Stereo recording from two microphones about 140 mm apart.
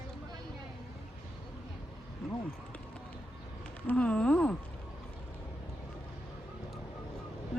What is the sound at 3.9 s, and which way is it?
Speech, 10° left (ahead or behind).